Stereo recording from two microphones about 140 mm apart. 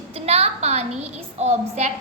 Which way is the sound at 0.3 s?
50° right (ahead or behind).